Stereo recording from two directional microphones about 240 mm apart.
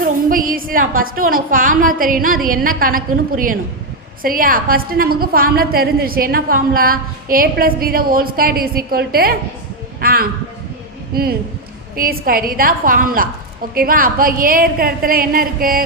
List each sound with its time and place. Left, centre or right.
0.0 s a woman's voice: right